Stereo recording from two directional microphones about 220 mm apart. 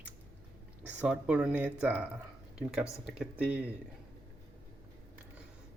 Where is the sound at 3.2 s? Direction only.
5° right (ahead or behind).